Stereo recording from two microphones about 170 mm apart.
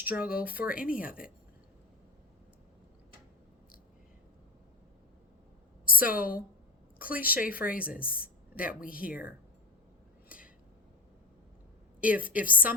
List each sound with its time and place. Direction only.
0.0 s a woman's voice: 10° right (ahead or behind)
0.7 s a woman's voice: 55° left (ahead or behind)
5.8 s a woman's voice: 55° left (ahead or behind)
7.1 s a woman's voice: 10° right (ahead or behind)
7.3 s a woman's voice: 55° left (ahead or behind)
11.9 s a woman's voice: 10° right (ahead or behind)